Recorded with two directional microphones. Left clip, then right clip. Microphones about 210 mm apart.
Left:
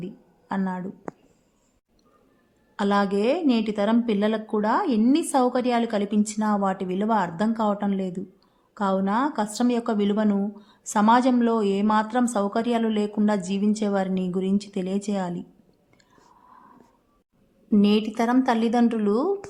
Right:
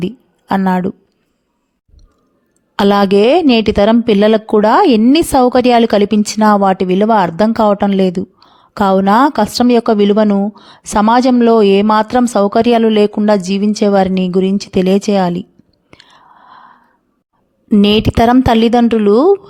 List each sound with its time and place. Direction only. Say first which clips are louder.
0.0 s a woman's voice: right 16 dB; 45° right (ahead or behind)
2.7 s a woman's voice: right 13 dB; 40° right (ahead or behind)
15.9 s whispering: right 16 dB; 40° right (ahead or behind)
17.7 s a woman's voice: right 11 dB; 45° right (ahead or behind)